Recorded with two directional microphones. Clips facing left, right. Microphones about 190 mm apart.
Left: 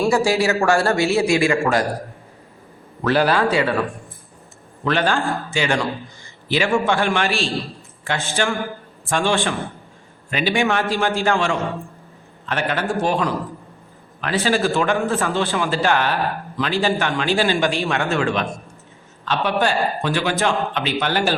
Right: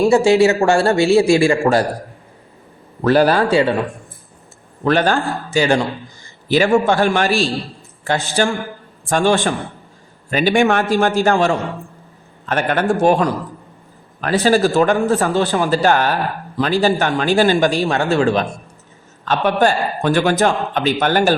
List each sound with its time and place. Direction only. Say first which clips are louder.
0.0 s a man's voice: right 6 dB; 25° right (ahead or behind)
3.0 s a man's voice: right 4 dB; 45° right (ahead or behind)
3.5 s a man's voice: right 5 dB; 30° right (ahead or behind)
4.8 s a man's voice: right 4 dB; 40° right (ahead or behind)
19.2 s a man's voice: right 5 dB; 45° right (ahead or behind)